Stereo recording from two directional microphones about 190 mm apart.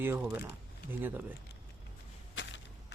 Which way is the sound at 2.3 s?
70° left (ahead or behind).